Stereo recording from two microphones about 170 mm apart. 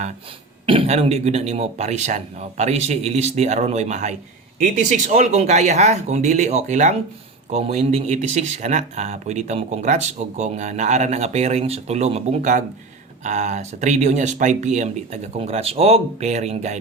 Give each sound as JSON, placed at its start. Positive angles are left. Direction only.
{"t": 0.6, "sound": "speech", "side_deg": -35}